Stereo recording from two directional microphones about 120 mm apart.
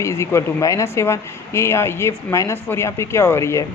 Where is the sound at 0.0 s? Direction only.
25° left (ahead or behind).